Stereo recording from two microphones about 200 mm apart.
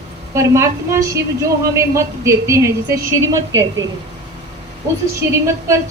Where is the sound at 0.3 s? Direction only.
15° right (ahead or behind).